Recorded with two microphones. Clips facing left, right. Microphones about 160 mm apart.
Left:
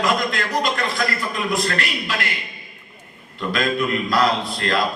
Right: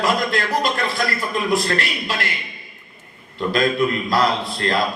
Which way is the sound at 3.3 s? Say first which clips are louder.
Right 3 dB; 30° right (ahead or behind).